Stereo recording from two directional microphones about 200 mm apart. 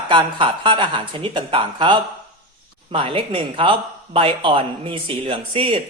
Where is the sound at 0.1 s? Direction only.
25° right (ahead or behind).